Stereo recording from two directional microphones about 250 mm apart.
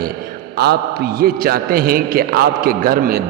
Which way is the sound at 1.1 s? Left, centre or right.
Right.